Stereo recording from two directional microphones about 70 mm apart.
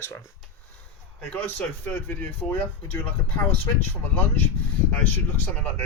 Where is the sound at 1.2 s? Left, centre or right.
Left.